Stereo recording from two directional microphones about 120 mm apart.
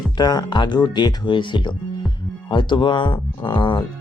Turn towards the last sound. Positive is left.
turn(degrees=40)  # may be behind; listen again after turning